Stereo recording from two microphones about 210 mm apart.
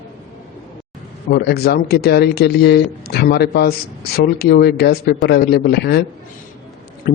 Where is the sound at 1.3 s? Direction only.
50° left (ahead or behind).